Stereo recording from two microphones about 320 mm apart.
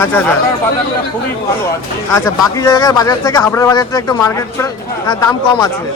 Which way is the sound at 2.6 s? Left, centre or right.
Centre.